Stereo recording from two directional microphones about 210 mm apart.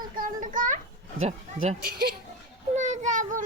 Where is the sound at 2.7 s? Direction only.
35° right (ahead or behind).